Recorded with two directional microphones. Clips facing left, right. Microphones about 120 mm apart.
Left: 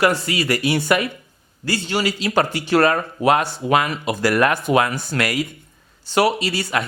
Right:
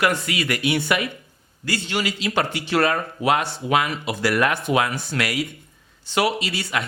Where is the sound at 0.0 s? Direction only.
35° left (ahead or behind).